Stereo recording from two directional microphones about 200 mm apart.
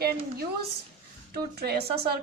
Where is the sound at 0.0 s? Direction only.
50° right (ahead or behind).